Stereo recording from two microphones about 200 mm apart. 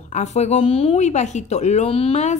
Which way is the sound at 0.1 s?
35° left (ahead or behind).